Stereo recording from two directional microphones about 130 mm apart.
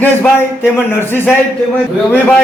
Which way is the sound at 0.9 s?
20° left (ahead or behind).